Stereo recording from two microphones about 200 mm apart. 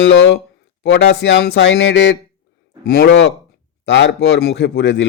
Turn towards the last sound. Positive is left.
turn(degrees=65)  # may be behind; listen again after turning